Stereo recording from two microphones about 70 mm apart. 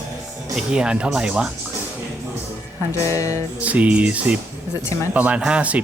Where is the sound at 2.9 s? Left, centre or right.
Left.